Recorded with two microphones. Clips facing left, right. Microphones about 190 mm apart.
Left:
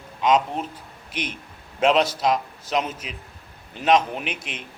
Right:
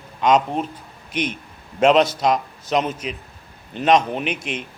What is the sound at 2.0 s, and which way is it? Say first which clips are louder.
A man's voice: right 3 dB; 5° left (ahead or behind).